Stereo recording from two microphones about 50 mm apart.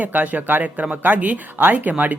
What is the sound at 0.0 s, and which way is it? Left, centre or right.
A woman's voice, right.